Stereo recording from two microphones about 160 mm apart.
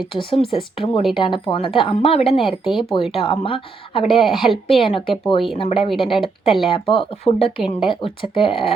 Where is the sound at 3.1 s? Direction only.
35° left (ahead or behind).